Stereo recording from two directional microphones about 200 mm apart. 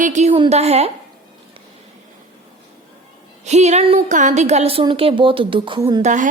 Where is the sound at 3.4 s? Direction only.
35° right (ahead or behind).